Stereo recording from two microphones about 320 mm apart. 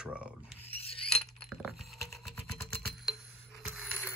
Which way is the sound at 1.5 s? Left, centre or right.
Centre.